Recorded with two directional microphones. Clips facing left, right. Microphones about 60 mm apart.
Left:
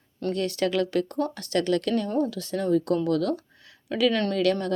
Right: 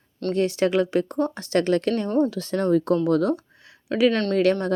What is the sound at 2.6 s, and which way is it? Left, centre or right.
Speech, right.